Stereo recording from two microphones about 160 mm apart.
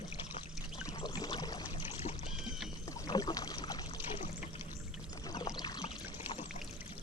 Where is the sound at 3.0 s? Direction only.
25° left (ahead or behind).